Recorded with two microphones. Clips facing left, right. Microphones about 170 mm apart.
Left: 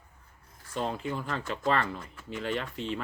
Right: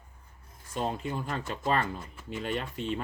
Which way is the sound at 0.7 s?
20° right (ahead or behind).